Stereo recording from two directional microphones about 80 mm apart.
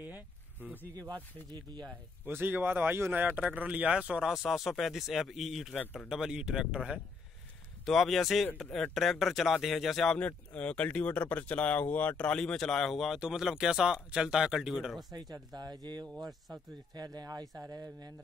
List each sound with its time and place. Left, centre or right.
0.0 s a sound: right
0.9 s speech: right
2.2 s speech: right
7.8 s speech: centre
10.1 s speech: centre
15.5 s speech: right